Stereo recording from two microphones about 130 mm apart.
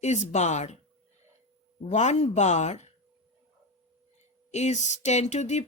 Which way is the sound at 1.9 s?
60° left (ahead or behind).